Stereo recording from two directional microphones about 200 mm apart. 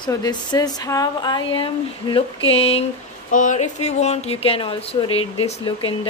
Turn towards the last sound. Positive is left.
turn(degrees=25)  # may be behind; listen again after turning